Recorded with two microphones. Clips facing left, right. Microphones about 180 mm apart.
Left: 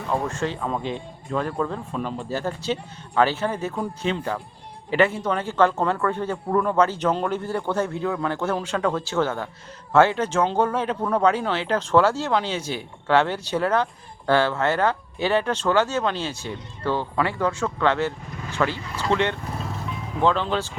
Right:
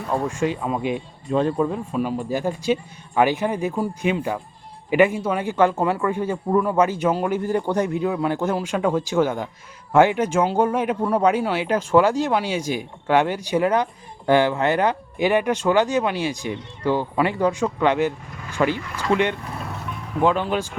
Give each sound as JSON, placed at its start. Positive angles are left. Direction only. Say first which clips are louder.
{"t": 0.1, "sound": "speech", "louder": "right 3 dB", "side_deg": -10}